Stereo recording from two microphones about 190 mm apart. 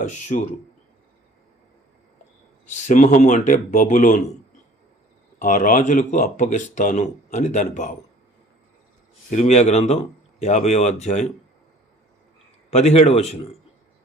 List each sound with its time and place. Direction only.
2.6 s speech: 40° left (ahead or behind)
5.4 s speech: 45° left (ahead or behind)
9.3 s speech: 35° left (ahead or behind)
12.7 s speech: 35° left (ahead or behind)